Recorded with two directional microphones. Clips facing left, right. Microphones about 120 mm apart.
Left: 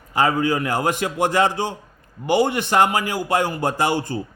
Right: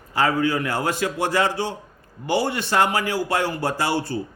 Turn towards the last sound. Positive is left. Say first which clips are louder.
# left 2 dB
turn(degrees=15)  # may be behind; listen again after turning